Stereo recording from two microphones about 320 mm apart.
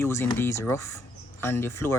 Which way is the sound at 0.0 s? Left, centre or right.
Centre.